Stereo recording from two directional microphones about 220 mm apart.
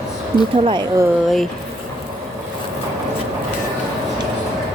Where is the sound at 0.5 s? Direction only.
20° right (ahead or behind).